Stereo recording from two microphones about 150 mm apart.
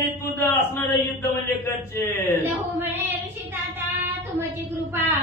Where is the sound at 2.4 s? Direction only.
15° right (ahead or behind).